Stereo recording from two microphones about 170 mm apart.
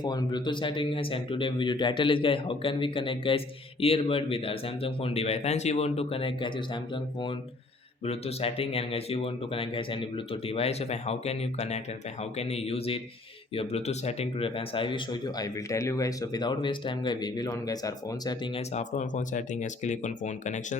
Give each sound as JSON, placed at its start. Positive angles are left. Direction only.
{"t": 0.0, "sound": "a man's voice", "side_deg": 25}
{"t": 18.7, "sound": "speech", "side_deg": 45}